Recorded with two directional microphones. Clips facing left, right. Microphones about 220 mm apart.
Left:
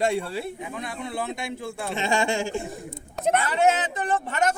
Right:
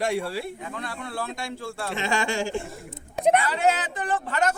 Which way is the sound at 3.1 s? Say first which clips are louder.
Right 3 dB; centre (ahead or behind).